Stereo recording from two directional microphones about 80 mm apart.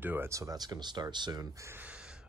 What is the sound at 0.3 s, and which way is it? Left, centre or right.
Speech, right.